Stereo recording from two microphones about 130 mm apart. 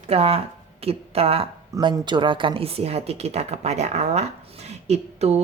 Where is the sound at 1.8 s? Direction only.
35° right (ahead or behind).